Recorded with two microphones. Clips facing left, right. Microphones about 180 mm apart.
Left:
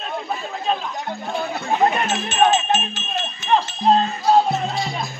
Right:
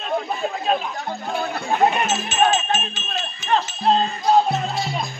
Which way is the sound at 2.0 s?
Centre (ahead or behind).